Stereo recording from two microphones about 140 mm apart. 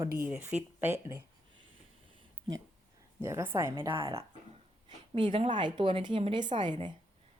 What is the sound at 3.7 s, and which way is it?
A woman's voice, 35° right (ahead or behind).